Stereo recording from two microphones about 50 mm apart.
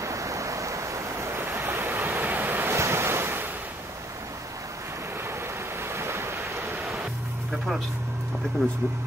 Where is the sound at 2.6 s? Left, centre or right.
Right.